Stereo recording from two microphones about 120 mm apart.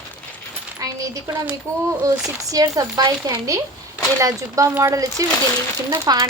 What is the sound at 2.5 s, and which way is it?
Speech, 30° right (ahead or behind).